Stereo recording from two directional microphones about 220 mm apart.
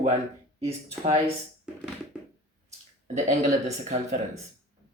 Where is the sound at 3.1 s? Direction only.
35° right (ahead or behind).